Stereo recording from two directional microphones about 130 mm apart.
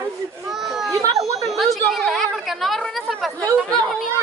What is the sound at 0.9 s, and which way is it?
Children playing, 25° right (ahead or behind).